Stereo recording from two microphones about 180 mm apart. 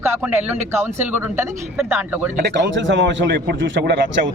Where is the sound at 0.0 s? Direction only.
10° right (ahead or behind).